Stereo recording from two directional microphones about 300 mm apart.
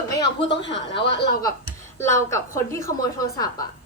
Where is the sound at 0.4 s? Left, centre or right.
Left.